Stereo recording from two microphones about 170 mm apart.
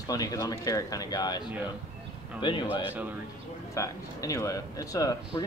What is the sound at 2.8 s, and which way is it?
Speech, 10° right (ahead or behind).